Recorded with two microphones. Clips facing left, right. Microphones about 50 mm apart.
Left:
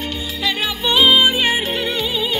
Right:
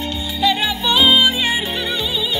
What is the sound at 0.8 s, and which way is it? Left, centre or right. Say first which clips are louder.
Music: left 1 dB; centre.